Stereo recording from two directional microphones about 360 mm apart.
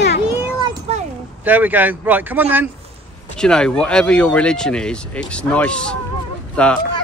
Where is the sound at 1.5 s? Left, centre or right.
Centre.